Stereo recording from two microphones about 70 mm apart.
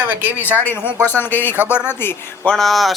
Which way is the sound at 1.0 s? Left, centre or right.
Left.